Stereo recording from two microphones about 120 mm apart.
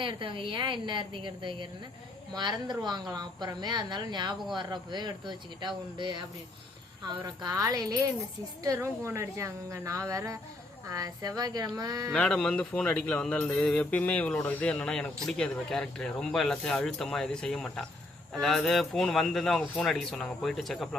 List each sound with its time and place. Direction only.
0.0 s a woman's voice: 45° right (ahead or behind)
12.1 s speech: 10° left (ahead or behind)